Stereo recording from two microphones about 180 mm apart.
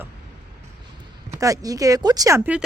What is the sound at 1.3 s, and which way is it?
Speech, 20° right (ahead or behind).